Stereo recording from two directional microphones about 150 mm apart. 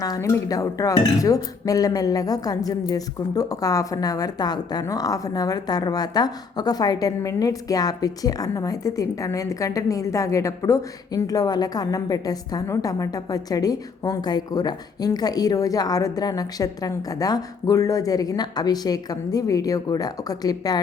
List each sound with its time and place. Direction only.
0.0 s speech: 20° left (ahead or behind)